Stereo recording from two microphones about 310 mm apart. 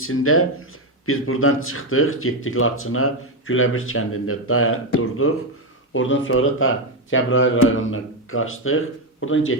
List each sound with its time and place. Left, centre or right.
0.0 s speech: left